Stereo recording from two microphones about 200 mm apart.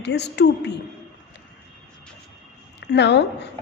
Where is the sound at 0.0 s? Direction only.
55° left (ahead or behind).